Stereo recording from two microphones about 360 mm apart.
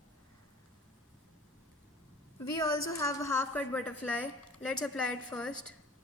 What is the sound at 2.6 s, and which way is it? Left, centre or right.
Speech, left.